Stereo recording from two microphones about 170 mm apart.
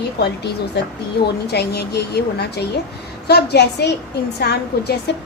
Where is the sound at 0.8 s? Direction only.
80° left.